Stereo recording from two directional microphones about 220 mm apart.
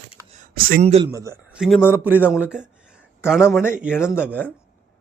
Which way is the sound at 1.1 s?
15° right (ahead or behind).